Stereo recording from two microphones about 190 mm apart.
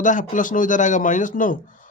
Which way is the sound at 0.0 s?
40° left (ahead or behind).